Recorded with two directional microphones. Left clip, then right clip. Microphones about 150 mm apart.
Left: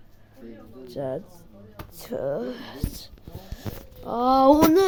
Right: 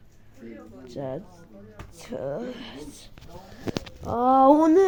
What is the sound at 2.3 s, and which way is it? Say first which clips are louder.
Speech: left 3 dB; 35° left (ahead or behind).